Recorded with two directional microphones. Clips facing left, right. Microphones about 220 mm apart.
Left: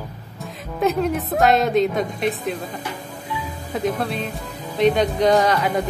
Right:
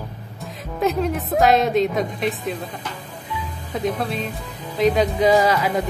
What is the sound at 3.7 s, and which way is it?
A woman's voice, centre (ahead or behind).